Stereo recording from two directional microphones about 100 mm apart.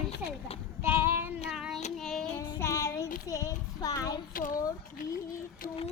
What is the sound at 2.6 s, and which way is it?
Child singing, 30° left (ahead or behind).